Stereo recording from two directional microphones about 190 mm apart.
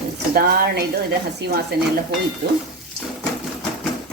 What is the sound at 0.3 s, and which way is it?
A woman's voice, 55° right (ahead or behind).